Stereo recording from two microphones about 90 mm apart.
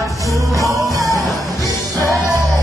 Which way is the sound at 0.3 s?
40° right (ahead or behind).